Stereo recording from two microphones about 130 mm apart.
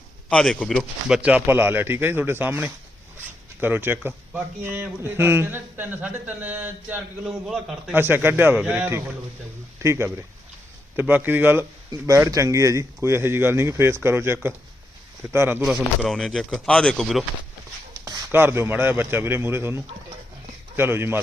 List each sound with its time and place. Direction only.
0.3 s speech: 5° left (ahead or behind); by 6.7 s 15° right (ahead or behind)
7.3 s speech: 5° right (ahead or behind)
7.9 s a man's voice: 15° right (ahead or behind)
16.0 s speech: 5° left (ahead or behind)
17.9 s a sound: 30° right (ahead or behind)
18.3 s speech: 15° right (ahead or behind)